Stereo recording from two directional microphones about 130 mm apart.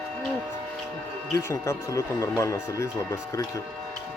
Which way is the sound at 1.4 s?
25° left (ahead or behind).